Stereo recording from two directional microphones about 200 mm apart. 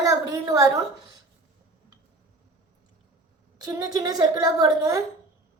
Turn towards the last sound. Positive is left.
turn(degrees=-15)  # may be behind; listen again after turning